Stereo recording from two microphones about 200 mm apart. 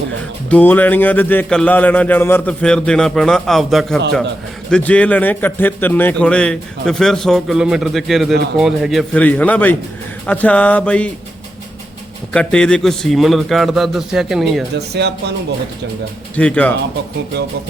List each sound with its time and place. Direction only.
0.5 s a man's voice: 10° left (ahead or behind)
12.3 s a man's voice: 5° left (ahead or behind)
14.8 s speech: 55° right (ahead or behind)
16.3 s speech: 5° left (ahead or behind)